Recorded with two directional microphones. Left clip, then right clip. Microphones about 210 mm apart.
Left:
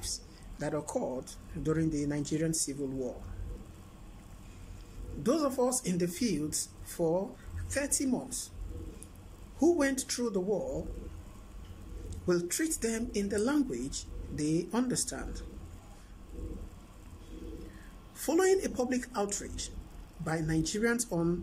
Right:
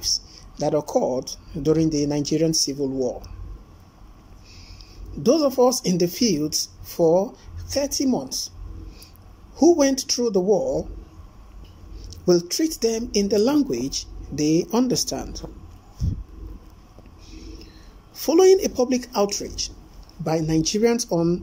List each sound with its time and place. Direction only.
0.6 s speech: 15° right (ahead or behind)
5.2 s speech: 15° right (ahead or behind)
9.7 s speech: 15° right (ahead or behind)
12.3 s speech: 15° right (ahead or behind)
18.2 s speech: 15° right (ahead or behind)